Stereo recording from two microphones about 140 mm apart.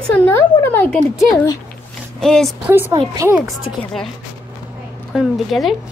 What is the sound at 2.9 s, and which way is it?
Speech, 25° right (ahead or behind).